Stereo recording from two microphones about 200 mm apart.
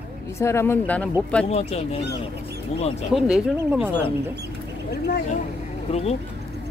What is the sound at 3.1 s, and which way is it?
Speech, centre (ahead or behind).